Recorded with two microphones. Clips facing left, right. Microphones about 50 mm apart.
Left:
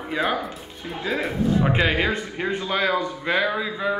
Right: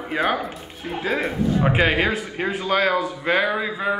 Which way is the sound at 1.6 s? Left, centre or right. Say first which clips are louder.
Right 5 dB; centre.